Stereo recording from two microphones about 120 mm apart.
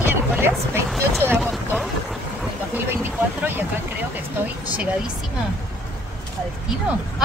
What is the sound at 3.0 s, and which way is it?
Vehicle, 15° right (ahead or behind).